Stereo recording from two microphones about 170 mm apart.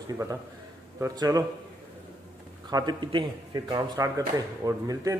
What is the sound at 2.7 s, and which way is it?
A man's voice, 25° right (ahead or behind).